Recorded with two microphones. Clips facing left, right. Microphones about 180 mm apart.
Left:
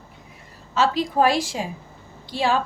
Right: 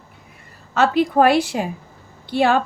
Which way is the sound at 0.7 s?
60° right (ahead or behind).